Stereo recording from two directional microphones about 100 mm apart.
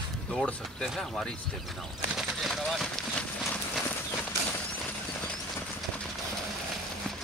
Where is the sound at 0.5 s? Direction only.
5° left (ahead or behind).